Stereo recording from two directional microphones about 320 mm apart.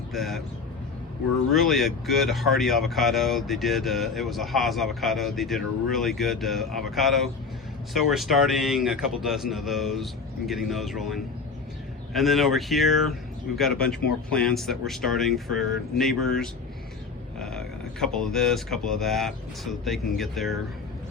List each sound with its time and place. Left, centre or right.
0.1 s speech: centre
1.5 s speech: centre
18.0 s speech: centre